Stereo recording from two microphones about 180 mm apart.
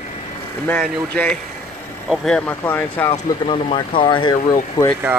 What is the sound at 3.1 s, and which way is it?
Speech, 30° left (ahead or behind).